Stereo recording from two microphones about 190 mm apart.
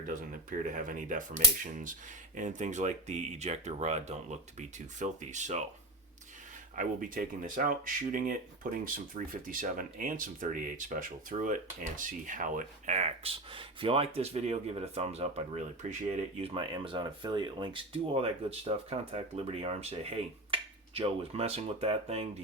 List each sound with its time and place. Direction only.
0.7 s speech: 45° right (ahead or behind)
6.7 s speech: 45° right (ahead or behind)